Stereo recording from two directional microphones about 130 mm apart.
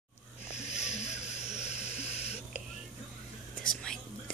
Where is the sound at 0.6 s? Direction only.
60° left (ahead or behind).